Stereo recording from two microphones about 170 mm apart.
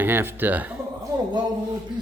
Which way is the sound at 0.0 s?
15° right (ahead or behind).